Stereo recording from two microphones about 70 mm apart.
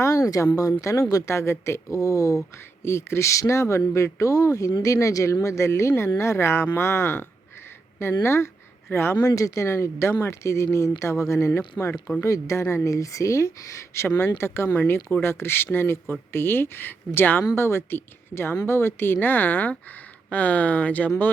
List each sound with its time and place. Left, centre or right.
0.0 s a woman's voice: left
2.0 s speech: left
2.8 s a woman's voice: left
9.2 s a woman's voice: left
17.5 s speech: left